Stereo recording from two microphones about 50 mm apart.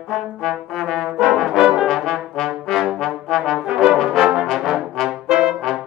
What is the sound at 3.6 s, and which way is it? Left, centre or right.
Brass instrument, centre.